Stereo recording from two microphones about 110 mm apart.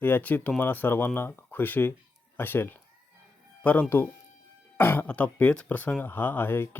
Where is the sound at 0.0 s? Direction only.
15° left (ahead or behind).